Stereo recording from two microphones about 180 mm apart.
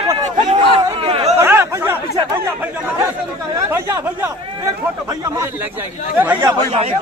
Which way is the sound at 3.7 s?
15° right (ahead or behind).